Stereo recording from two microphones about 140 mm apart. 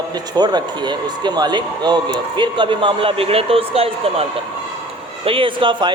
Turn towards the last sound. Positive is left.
turn(degrees=-35)  # may be behind; listen again after turning